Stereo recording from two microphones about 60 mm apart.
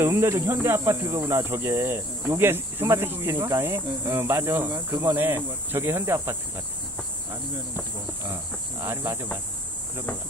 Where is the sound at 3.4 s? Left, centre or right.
Right.